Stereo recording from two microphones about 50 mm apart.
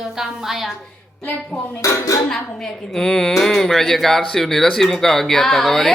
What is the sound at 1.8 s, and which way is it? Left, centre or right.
Dishes, left.